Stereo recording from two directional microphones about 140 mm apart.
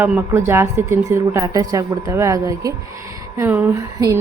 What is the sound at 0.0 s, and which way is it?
A woman's voice, 15° right (ahead or behind).